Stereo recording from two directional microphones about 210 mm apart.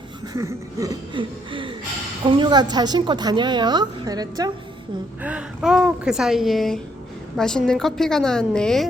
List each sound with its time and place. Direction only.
0.3 s a woman's voice: 15° right (ahead or behind)
5.2 s a woman's voice: 5° right (ahead or behind)